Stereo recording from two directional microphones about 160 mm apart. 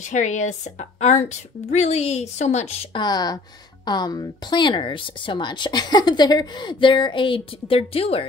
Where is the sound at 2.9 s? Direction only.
25° left (ahead or behind).